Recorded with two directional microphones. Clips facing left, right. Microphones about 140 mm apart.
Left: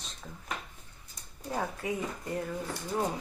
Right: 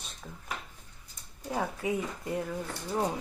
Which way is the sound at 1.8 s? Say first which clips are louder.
Right 2 dB; 15° right (ahead or behind).